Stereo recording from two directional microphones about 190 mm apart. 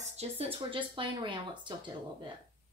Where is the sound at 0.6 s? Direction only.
25° right (ahead or behind).